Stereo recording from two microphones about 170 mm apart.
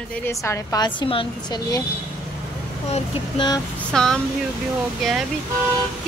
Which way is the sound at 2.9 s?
25° left (ahead or behind).